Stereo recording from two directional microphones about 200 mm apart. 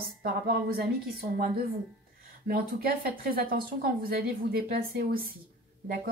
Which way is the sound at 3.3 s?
45° right (ahead or behind).